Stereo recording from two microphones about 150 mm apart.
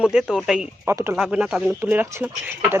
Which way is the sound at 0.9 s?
15° right (ahead or behind).